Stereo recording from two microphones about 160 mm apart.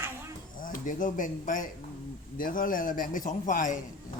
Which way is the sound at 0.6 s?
55° left (ahead or behind).